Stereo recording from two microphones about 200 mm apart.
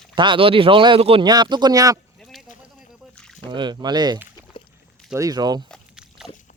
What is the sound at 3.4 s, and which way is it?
A man's voice, 25° right (ahead or behind).